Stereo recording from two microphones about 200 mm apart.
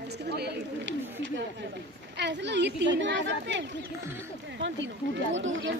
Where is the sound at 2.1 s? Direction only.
60° right (ahead or behind).